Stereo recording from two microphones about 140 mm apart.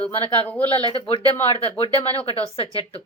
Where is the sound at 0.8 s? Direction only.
40° left (ahead or behind).